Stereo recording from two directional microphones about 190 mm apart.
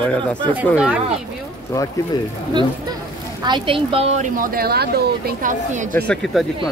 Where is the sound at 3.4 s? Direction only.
25° right (ahead or behind); by 5.8 s 40° right (ahead or behind).